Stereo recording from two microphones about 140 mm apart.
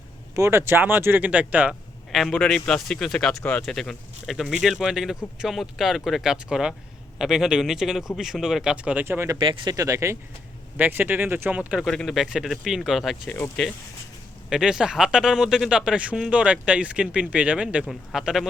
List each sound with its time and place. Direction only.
0.3 s speech: 20° right (ahead or behind)
2.1 s speech: 5° left (ahead or behind); by 9.4 s 20° right (ahead or behind)
9.4 s speech: 35° right (ahead or behind); by 11.9 s 10° right (ahead or behind)
11.9 s speech: centre (ahead or behind)
14.5 s speech: 5° right (ahead or behind)